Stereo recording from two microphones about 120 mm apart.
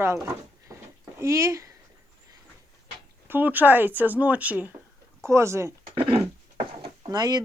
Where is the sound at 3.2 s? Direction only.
15° right (ahead or behind).